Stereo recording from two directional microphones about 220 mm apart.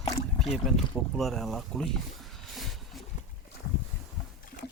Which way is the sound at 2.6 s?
Centre (ahead or behind).